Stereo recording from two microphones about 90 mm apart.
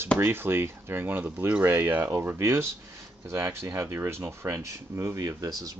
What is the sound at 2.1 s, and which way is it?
Speech, 35° right (ahead or behind).